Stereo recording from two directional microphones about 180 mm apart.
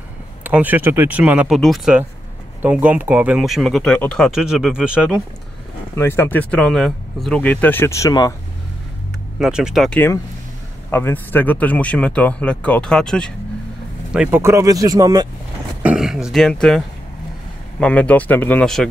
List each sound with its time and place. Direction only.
0.4 s speech: 10° right (ahead or behind)
5.9 s speech: 15° left (ahead or behind)
9.4 s speech: 5° right (ahead or behind)
14.1 s speech: 10° right (ahead or behind)
15.8 s speech: 5° right (ahead or behind)